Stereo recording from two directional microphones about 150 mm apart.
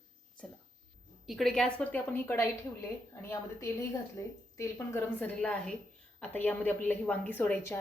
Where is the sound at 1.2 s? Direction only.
Centre (ahead or behind).